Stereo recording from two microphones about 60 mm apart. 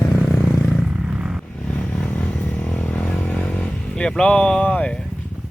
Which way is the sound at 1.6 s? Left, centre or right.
Centre.